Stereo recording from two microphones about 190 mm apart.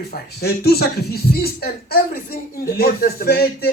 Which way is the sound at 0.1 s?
55° left (ahead or behind).